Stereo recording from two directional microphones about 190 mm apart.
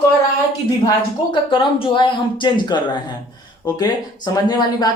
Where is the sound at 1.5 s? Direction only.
25° left (ahead or behind).